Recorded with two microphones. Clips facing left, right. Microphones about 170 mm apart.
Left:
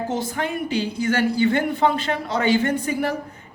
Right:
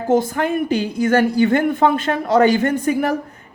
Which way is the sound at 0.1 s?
50° right (ahead or behind).